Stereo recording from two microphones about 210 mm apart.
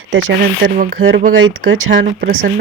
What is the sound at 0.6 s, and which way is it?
Speech, 45° right (ahead or behind).